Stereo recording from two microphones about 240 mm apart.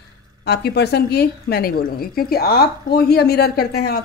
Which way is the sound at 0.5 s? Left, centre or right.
Left.